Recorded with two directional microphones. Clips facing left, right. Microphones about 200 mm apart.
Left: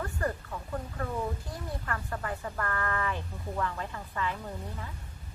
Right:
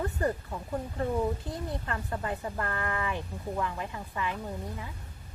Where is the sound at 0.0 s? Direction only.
20° right (ahead or behind).